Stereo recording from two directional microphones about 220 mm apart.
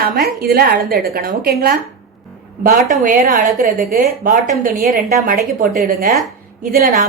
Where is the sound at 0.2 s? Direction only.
45° right (ahead or behind).